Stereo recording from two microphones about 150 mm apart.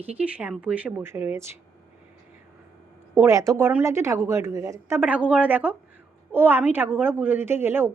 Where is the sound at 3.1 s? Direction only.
20° right (ahead or behind).